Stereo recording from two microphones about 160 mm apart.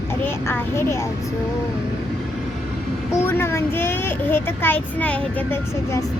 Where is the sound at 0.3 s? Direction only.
15° left (ahead or behind).